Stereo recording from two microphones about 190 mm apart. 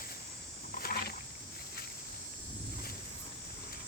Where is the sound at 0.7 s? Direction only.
50° left (ahead or behind).